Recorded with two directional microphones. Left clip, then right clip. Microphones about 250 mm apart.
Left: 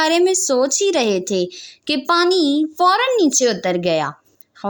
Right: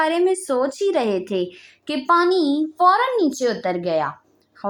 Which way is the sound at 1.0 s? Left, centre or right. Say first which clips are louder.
Left 3 dB; left.